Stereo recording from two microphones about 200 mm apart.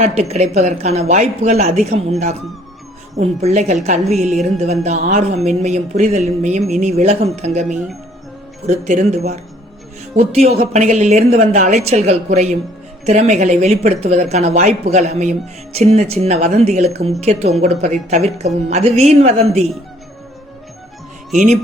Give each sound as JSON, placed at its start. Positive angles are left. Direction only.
{"t": 0.0, "sound": "speech", "side_deg": -30}
{"t": 21.3, "sound": "speech", "side_deg": -35}